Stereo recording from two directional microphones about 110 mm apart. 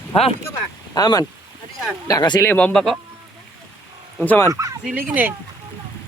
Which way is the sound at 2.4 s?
10° left (ahead or behind).